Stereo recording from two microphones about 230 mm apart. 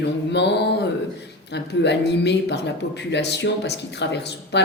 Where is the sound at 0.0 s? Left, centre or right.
Left.